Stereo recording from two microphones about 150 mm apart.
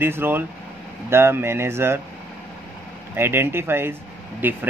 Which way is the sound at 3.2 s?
15° right (ahead or behind).